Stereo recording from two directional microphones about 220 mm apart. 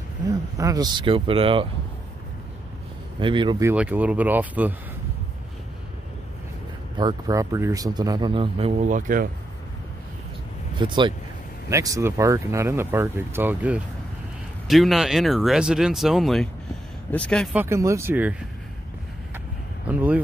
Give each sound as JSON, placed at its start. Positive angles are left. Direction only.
{"t": 0.3, "sound": "speech", "side_deg": -15}
{"t": 3.2, "sound": "speech", "side_deg": -20}
{"t": 3.7, "sound": "speech", "side_deg": -5}
{"t": 7.0, "sound": "speech", "side_deg": -20}
{"t": 10.8, "sound": "speech", "side_deg": -20}
{"t": 17.6, "sound": "speech", "side_deg": -15}
{"t": 19.9, "sound": "speech", "side_deg": -5}